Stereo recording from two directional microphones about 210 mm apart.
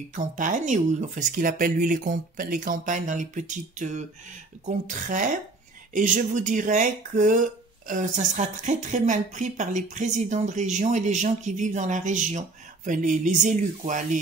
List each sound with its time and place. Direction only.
0.1 s speech: 40° right (ahead or behind)